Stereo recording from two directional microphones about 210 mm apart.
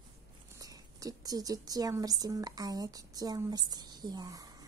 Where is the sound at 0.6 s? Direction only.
15° right (ahead or behind).